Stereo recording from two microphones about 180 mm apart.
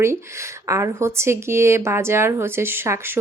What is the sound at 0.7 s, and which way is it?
Speech, 15° right (ahead or behind).